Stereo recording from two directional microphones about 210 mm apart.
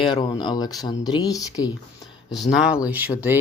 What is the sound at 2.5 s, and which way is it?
Speech, 5° right (ahead or behind).